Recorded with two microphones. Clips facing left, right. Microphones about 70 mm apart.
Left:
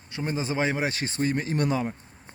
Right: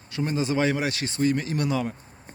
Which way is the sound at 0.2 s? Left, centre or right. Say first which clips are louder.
Right 3 dB; left.